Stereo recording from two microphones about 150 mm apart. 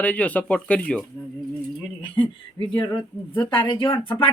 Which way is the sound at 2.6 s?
35° left (ahead or behind).